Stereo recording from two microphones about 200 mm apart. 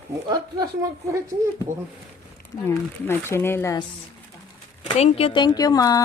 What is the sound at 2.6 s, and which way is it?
Speech, 10° left (ahead or behind).